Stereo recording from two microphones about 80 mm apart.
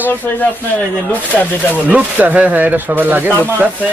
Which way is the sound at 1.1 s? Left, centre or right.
Left.